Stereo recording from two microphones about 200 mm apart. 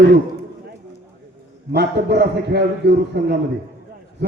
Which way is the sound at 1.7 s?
55° right (ahead or behind).